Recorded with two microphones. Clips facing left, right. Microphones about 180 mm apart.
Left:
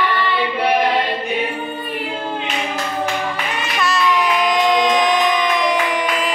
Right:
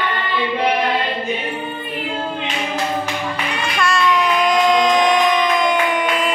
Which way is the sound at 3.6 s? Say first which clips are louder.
Right 1 dB; centre (ahead or behind).